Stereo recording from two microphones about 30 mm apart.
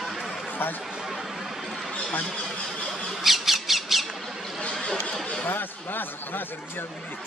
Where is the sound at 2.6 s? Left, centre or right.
Centre.